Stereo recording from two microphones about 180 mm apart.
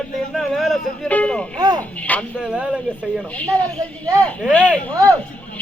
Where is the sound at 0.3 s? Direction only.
Centre (ahead or behind).